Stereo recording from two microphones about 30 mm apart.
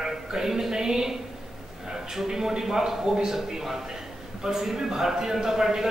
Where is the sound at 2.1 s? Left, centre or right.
Centre.